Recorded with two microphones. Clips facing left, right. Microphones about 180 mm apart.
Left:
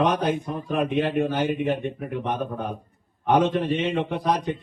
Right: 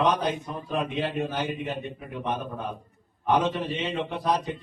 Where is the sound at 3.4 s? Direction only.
60° left (ahead or behind).